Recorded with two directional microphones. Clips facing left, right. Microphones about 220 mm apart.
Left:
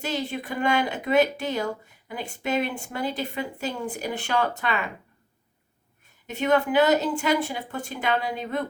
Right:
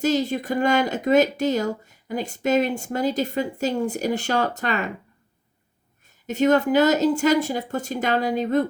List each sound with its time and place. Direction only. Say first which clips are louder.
0.0 s speech: right 8 dB; 40° right (ahead or behind)
6.2 s speech: right 4 dB; 40° right (ahead or behind)